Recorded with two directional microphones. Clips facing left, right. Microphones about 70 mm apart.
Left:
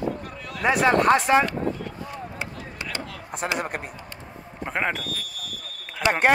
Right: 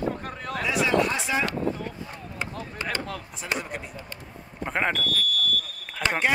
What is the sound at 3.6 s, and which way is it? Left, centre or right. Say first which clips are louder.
Speech: left 5 dB; left.